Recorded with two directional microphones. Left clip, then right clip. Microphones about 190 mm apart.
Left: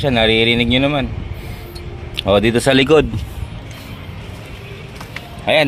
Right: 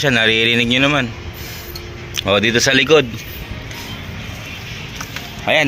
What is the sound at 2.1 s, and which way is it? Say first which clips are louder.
Speech: even; 15° left (ahead or behind).